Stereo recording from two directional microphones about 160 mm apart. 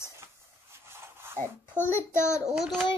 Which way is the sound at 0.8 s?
15° right (ahead or behind).